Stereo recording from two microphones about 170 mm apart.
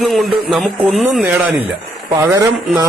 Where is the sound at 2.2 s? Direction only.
20° right (ahead or behind).